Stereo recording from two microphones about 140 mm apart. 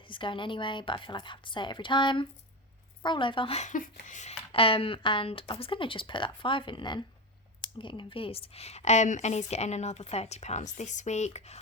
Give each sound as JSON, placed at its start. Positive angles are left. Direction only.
{"t": 0.1, "sound": "speech", "side_deg": 35}
{"t": 3.6, "sound": "a sound", "side_deg": 65}
{"t": 4.5, "sound": "a woman's voice", "side_deg": 40}